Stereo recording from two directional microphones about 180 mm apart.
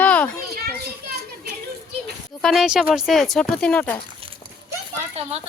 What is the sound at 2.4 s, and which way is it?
Speech, centre (ahead or behind).